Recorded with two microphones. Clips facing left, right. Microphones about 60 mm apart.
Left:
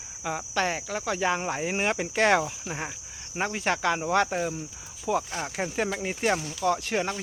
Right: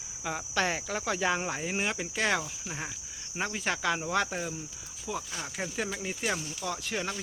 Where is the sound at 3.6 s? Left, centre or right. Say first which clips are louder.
Left 4 dB; left.